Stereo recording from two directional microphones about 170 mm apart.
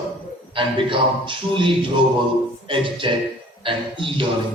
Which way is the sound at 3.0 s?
30° right (ahead or behind).